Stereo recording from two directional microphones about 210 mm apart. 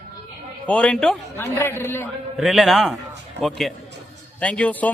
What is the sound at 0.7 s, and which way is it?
A man's voice, 5° left (ahead or behind).